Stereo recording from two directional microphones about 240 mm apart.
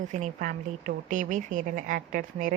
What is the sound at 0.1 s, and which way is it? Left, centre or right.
A woman's voice, right.